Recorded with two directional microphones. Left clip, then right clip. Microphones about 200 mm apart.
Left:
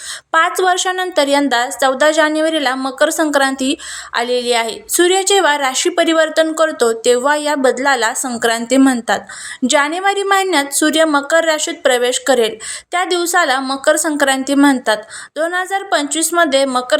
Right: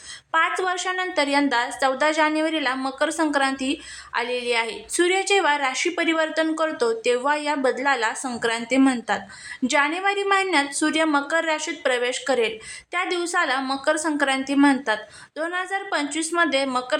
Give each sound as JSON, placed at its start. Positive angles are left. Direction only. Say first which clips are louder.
{"t": 0.3, "sound": "a woman's voice", "louder": "left 8 dB", "side_deg": 25}